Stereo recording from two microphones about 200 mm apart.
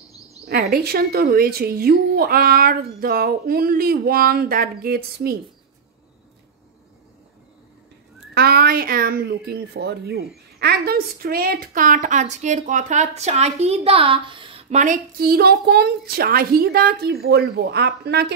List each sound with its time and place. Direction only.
0.5 s a woman's voice: 50° right (ahead or behind)
8.4 s a woman's voice: 50° right (ahead or behind)